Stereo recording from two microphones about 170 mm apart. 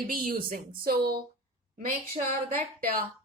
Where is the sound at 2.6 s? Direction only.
55° right (ahead or behind).